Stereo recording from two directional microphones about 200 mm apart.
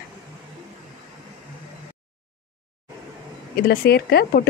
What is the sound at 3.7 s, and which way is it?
Speech, 50° left (ahead or behind).